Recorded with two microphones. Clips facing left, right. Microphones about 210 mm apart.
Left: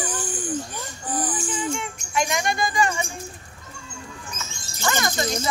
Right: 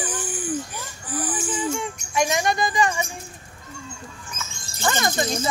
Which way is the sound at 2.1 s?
20° right (ahead or behind).